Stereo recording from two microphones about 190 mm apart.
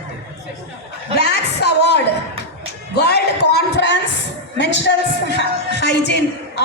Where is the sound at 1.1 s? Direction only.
60° left (ahead or behind).